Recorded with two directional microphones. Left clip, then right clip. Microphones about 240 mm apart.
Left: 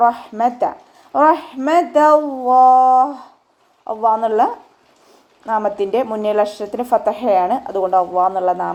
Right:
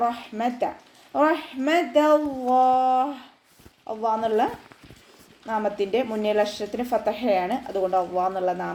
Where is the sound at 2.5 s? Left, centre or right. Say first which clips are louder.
Left 9 dB; left.